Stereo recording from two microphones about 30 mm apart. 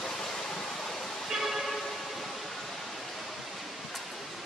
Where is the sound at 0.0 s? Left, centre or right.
Left.